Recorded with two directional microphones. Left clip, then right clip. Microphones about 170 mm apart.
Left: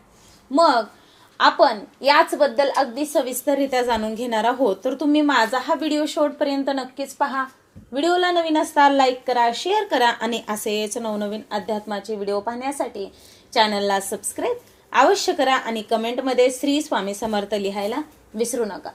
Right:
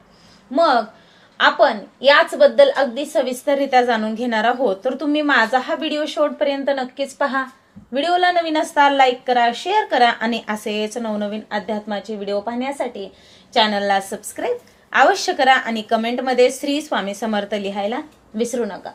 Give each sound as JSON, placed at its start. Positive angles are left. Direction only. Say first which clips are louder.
{"t": 0.5, "sound": "a woman's voice", "louder": "right 1 dB", "side_deg": 45}